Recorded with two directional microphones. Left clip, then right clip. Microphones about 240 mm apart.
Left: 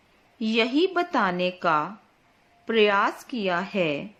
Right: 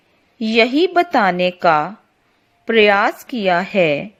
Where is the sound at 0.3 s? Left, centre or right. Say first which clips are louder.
Right 9 dB; right.